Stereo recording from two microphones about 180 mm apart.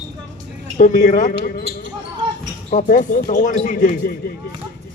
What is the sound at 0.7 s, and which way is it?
Speech, 45° left (ahead or behind).